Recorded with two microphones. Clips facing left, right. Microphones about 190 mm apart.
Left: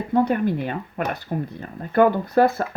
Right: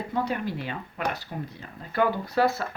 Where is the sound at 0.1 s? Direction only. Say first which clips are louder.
Left 10 dB; 50° left (ahead or behind).